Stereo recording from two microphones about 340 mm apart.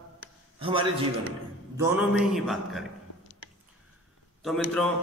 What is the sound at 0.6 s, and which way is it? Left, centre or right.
Speech, centre.